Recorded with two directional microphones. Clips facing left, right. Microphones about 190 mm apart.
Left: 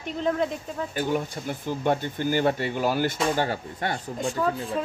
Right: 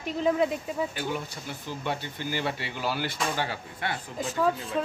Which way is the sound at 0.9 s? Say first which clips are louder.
Left 6 dB; 50° left (ahead or behind).